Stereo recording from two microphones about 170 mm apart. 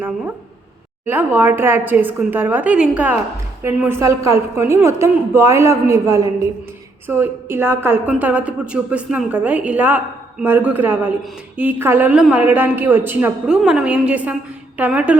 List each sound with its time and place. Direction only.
1.0 s a woman's voice: 10° right (ahead or behind)